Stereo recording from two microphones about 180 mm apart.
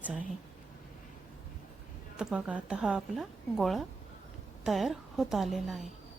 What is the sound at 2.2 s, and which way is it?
A woman's voice, 5° right (ahead or behind).